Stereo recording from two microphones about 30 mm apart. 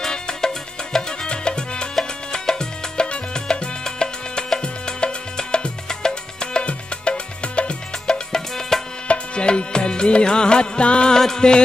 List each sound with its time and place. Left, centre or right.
0.1 s music: left
2.3 s music: left
6.6 s music: left
8.1 s music: centre
9.0 s music: left
11.1 s music: centre